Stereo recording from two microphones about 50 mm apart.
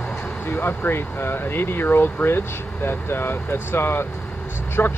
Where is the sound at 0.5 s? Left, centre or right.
Left.